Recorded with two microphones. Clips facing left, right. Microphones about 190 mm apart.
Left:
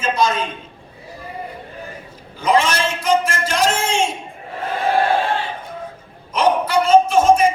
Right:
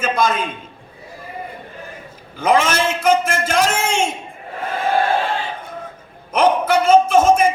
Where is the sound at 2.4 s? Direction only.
50° right (ahead or behind).